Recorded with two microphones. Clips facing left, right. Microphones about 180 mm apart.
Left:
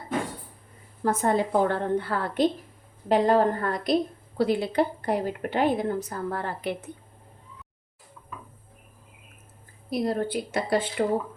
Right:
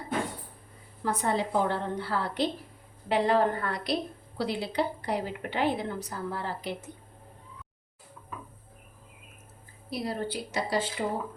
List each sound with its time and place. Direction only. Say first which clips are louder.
1.0 s a woman's voice: left 5 dB; 45° left (ahead or behind)
9.9 s speech: left 6 dB; 50° left (ahead or behind)